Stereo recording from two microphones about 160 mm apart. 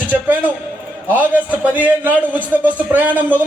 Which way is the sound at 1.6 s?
10° right (ahead or behind).